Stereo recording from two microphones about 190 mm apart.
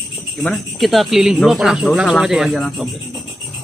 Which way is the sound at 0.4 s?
Centre (ahead or behind).